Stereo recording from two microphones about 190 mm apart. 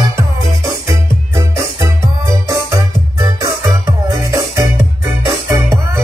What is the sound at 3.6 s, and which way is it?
Music, 15° right (ahead or behind).